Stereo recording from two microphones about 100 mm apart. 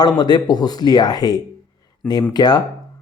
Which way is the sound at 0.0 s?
45° left (ahead or behind).